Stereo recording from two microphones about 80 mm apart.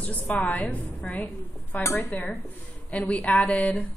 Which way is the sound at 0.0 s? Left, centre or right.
Centre.